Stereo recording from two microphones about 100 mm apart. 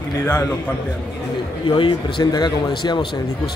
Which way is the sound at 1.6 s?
55° left (ahead or behind).